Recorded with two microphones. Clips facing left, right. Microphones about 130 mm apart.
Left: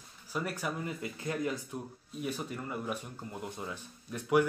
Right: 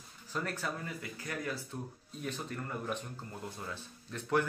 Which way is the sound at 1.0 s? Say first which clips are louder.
Left 6 dB; 25° left (ahead or behind).